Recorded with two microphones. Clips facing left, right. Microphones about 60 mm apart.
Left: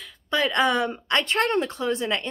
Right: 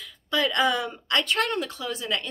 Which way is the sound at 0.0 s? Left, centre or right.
Left.